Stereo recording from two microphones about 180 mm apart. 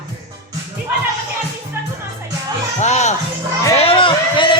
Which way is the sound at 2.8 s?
40° left (ahead or behind).